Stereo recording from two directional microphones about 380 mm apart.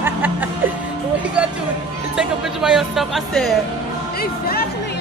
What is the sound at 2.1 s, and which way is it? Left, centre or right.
Music, centre.